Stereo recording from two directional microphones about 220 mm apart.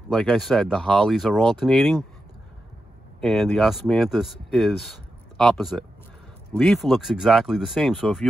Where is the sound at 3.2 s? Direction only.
Centre (ahead or behind).